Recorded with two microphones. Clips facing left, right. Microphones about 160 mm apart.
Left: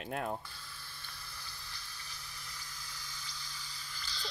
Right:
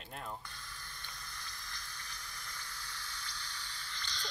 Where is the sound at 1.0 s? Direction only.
5° left (ahead or behind).